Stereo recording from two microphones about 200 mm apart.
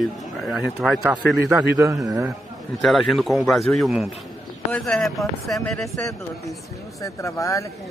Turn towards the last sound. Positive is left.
turn(degrees=15)  # may be behind; listen again after turning